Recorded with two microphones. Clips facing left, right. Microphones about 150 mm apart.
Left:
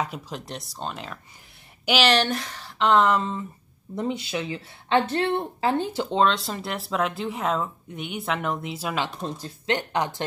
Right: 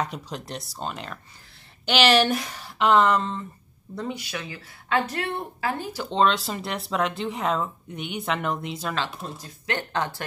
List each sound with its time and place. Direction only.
0.0 s speech: 5° left (ahead or behind)
3.9 s speech: 20° left (ahead or behind)
6.0 s speech: centre (ahead or behind)